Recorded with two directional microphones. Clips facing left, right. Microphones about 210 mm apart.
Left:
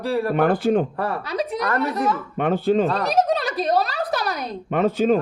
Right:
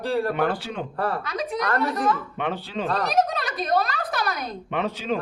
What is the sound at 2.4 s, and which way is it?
Speech, 50° left (ahead or behind).